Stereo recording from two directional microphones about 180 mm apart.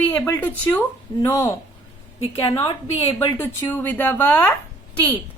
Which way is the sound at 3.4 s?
10° left (ahead or behind).